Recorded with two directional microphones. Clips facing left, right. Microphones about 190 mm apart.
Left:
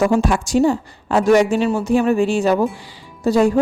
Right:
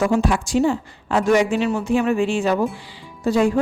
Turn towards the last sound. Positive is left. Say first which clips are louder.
# left 3 dB
turn(degrees=40)  # may be behind; listen again after turning